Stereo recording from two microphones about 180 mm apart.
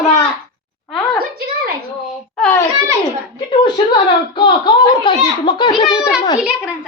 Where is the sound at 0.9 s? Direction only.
5° left (ahead or behind).